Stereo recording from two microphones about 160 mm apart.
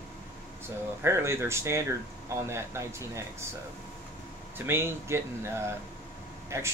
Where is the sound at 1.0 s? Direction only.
15° right (ahead or behind).